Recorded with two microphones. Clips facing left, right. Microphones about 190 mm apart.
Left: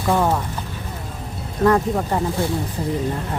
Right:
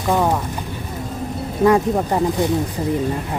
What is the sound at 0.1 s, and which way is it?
Speech, 10° right (ahead or behind).